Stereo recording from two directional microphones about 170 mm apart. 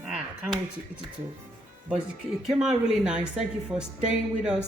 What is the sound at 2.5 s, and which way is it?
Speech, 5° right (ahead or behind).